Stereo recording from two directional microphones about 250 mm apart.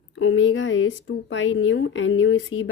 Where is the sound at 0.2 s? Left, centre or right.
Left.